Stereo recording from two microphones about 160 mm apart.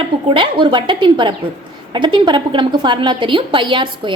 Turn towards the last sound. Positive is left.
turn(degrees=-30)  # may be behind; listen again after turning